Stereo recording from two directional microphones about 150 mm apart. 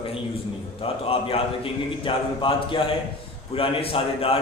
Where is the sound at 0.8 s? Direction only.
40° left (ahead or behind).